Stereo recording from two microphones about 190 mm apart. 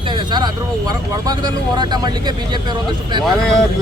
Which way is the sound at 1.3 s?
20° right (ahead or behind).